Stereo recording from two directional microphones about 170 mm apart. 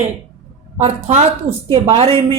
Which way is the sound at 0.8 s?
40° right (ahead or behind).